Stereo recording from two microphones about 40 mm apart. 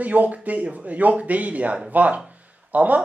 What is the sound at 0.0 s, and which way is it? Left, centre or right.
Speech, right.